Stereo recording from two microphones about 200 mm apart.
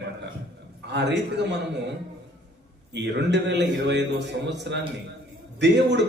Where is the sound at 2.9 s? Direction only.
60° right (ahead or behind).